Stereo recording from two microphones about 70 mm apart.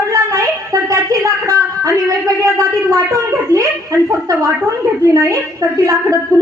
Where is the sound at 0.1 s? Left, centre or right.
Right.